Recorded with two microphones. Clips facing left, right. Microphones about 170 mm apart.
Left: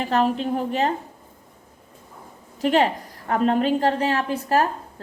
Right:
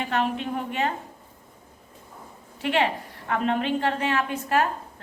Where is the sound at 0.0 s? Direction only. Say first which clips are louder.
Left 5 dB; 35° left (ahead or behind).